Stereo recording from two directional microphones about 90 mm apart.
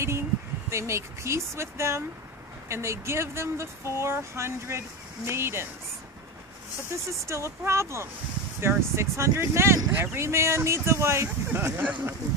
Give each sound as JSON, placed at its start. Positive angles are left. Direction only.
{"t": 0.7, "sound": "speech", "side_deg": -30}
{"t": 7.2, "sound": "speech", "side_deg": -30}
{"t": 11.8, "sound": "speech", "side_deg": -15}